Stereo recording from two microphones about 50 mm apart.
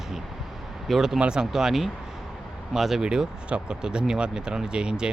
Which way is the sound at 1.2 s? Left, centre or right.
Centre.